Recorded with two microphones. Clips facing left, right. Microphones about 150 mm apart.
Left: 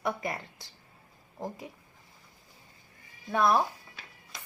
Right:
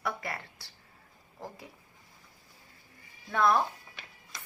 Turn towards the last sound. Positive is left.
turn(degrees=15)  # may be behind; listen again after turning